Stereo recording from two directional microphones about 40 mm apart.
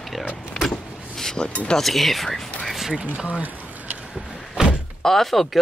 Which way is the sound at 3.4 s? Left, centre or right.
Right.